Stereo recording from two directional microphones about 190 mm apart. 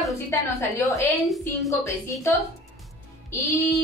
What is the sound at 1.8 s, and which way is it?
Speech, 15° left (ahead or behind).